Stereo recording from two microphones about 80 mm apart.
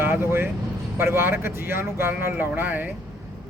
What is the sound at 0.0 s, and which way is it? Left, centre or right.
Speech, right.